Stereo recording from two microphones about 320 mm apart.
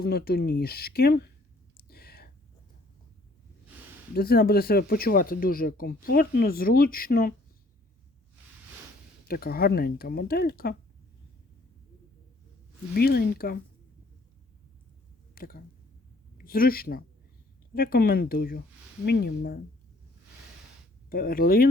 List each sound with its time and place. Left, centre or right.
0.0 s speech: left
1.9 s a sound: left
4.1 s speech: left
9.2 s speech: left
12.9 s speech: left
15.4 s speech: left
21.1 s speech: left